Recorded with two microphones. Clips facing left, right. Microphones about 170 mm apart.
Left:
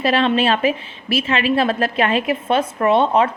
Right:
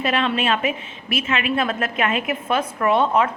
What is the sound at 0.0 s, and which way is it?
A woman's voice, 35° left (ahead or behind).